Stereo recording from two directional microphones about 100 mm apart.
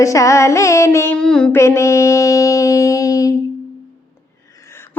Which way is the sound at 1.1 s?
5° left (ahead or behind).